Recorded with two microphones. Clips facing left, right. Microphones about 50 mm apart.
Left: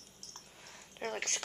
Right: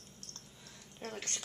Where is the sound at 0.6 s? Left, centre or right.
Left.